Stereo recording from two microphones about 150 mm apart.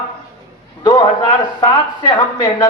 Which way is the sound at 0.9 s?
30° left (ahead or behind).